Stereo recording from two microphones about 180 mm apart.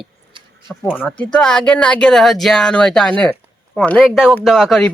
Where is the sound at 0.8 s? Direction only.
10° left (ahead or behind).